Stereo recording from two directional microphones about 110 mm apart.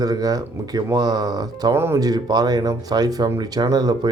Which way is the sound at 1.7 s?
20° right (ahead or behind).